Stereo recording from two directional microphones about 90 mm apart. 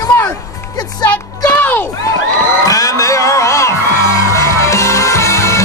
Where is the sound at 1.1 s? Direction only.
20° left (ahead or behind).